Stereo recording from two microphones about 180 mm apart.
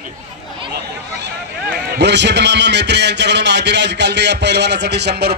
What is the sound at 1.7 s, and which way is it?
A man's voice, 65° right (ahead or behind).